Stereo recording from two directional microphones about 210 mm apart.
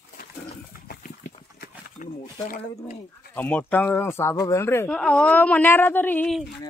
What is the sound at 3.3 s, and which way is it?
A man's voice, 5° left (ahead or behind).